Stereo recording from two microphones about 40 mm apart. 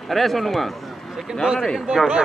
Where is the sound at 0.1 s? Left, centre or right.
Centre.